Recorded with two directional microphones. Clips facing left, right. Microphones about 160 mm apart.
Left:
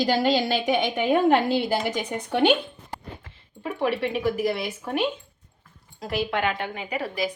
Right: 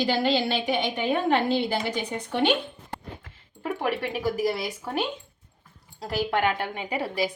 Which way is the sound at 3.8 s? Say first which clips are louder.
Left 4 dB; 40° right (ahead or behind).